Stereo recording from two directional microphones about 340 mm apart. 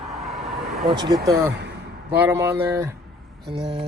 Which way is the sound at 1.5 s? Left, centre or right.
Right.